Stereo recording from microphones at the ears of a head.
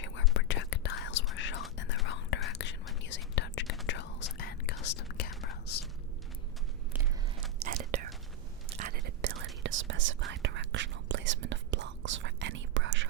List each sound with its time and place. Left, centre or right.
0.0 s whispering: left
7.6 s whispering: right